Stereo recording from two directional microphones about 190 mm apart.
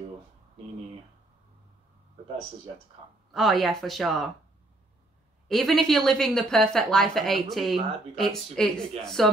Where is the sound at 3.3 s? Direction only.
Centre (ahead or behind).